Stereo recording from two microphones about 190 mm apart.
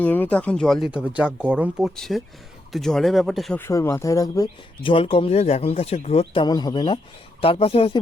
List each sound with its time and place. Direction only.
0.0 s speech: 10° left (ahead or behind)
3.6 s speech: 15° left (ahead or behind)